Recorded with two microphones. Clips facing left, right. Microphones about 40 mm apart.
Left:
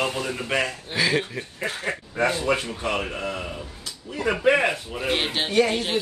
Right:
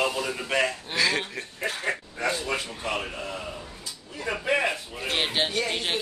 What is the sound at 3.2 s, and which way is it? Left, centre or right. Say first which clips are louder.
A man's voice: left 4 dB; left.